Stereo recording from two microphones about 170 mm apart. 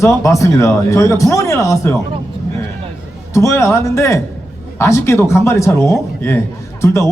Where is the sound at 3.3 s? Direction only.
15° left (ahead or behind).